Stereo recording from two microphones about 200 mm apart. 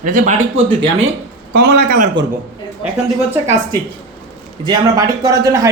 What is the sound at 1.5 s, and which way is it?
Speech, 50° right (ahead or behind).